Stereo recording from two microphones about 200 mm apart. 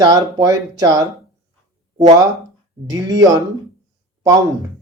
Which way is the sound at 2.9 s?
20° right (ahead or behind).